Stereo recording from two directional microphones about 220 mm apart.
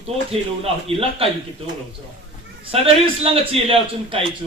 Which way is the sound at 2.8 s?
25° right (ahead or behind).